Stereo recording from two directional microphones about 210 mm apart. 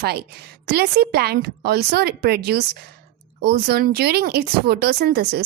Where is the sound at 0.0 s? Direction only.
50° right (ahead or behind).